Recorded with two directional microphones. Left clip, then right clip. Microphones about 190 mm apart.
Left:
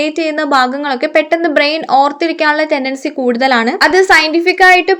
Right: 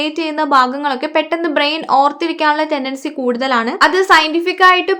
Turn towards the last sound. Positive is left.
turn(degrees=15)  # may be behind; listen again after turning